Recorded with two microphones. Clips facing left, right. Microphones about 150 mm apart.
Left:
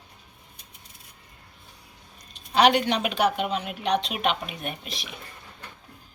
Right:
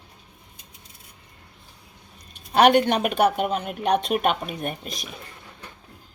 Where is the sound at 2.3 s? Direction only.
50° right (ahead or behind).